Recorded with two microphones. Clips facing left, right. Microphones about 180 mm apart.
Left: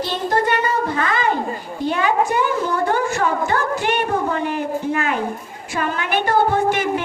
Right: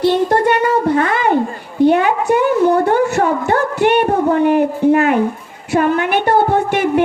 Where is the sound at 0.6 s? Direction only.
65° right (ahead or behind).